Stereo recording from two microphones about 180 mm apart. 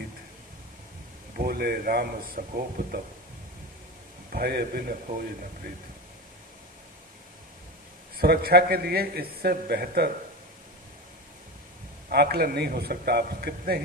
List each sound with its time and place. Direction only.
1.4 s a man's voice: 60° right (ahead or behind)
4.3 s a man's voice: 60° right (ahead or behind)
8.2 s a man's voice: 60° right (ahead or behind)
12.0 s a man's voice: 65° right (ahead or behind)